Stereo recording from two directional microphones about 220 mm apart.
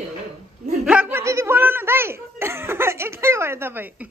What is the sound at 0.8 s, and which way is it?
Speech, 5° right (ahead or behind).